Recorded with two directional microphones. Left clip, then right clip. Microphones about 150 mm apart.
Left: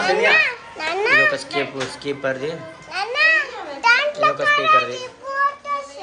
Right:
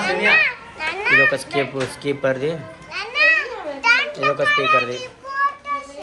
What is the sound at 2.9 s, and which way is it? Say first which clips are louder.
Children playing: even; 90° left.